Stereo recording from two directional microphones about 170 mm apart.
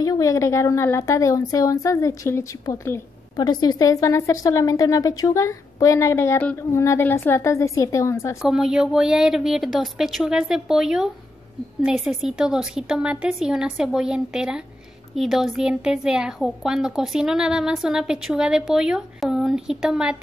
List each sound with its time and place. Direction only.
0.0 s a woman's voice: 20° left (ahead or behind)
8.4 s a woman's voice: 5° right (ahead or behind)